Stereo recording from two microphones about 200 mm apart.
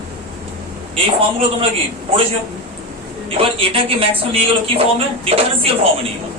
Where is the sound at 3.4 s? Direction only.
30° right (ahead or behind).